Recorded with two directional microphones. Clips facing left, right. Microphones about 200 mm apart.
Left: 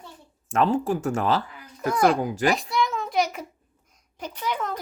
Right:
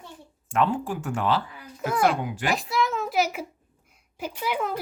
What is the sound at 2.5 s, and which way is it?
A child's voice, centre (ahead or behind).